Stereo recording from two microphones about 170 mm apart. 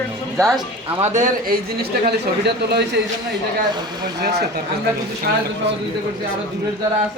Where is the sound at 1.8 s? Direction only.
70° right (ahead or behind).